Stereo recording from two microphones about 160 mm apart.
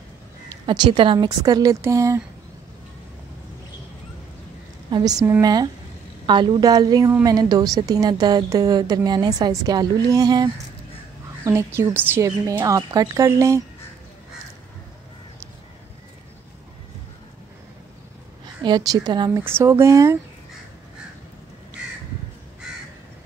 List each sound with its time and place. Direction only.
0.5 s a woman's voice: 30° right (ahead or behind)
4.9 s a woman's voice: 25° right (ahead or behind)
18.4 s a woman's voice: 30° right (ahead or behind)
19.4 s speech: 15° right (ahead or behind)